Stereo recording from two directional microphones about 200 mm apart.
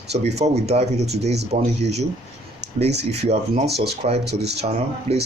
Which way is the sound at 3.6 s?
55° right (ahead or behind).